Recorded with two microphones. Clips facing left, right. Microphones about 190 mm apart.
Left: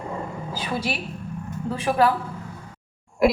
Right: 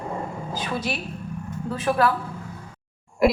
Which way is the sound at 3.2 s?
Centre (ahead or behind).